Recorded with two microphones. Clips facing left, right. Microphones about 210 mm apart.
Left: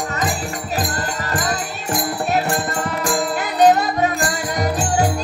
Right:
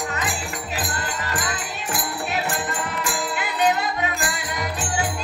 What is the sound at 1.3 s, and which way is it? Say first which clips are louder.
Music: left 7 dB; 40° left (ahead or behind).